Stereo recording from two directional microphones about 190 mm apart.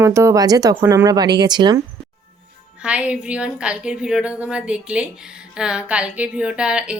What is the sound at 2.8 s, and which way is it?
A woman's voice, 5° right (ahead or behind).